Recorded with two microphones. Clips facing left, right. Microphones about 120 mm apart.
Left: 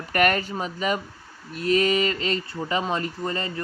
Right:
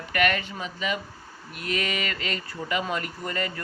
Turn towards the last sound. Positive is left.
turn(degrees=30)  # may be behind; listen again after turning